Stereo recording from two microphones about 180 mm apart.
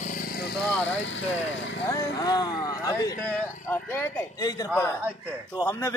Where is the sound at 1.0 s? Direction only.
90° left.